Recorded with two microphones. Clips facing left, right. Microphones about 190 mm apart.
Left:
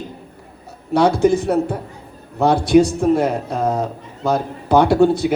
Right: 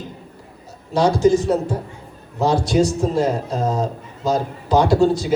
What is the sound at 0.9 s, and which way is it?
A man's voice, 60° left (ahead or behind).